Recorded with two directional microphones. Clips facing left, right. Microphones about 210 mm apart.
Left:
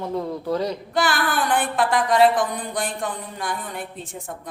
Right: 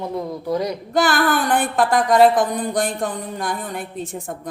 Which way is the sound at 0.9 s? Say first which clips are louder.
Right 6 dB; 45° right (ahead or behind).